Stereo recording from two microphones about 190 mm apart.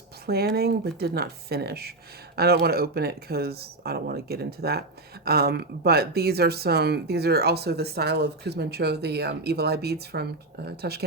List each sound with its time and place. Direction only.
0.3 s speech: 55° right (ahead or behind)